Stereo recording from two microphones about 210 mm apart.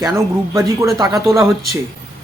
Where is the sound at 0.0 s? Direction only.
15° right (ahead or behind).